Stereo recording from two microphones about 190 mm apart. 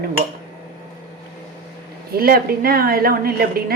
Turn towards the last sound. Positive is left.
turn(degrees=-50)  # may be behind; listen again after turning